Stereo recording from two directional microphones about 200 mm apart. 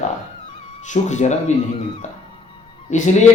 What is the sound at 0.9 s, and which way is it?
Speech, 35° left (ahead or behind).